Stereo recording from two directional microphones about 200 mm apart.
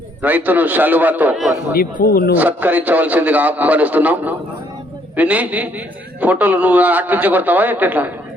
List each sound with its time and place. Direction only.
0.2 s a man's voice: 10° right (ahead or behind)
1.7 s speech: 45° left (ahead or behind)
2.3 s a man's voice: 10° right (ahead or behind)